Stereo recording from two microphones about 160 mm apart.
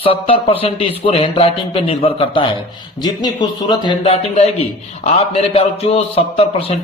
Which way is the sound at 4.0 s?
40° left (ahead or behind).